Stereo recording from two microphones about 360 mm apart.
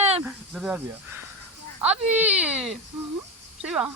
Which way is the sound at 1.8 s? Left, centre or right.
Centre.